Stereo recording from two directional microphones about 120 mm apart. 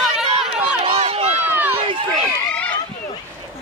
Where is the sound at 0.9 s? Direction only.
65° right (ahead or behind).